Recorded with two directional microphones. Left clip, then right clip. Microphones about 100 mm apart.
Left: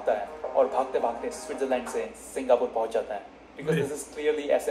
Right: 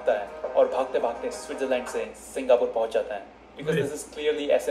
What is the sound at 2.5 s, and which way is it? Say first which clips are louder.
Speech: right 2 dB; 25° right (ahead or behind).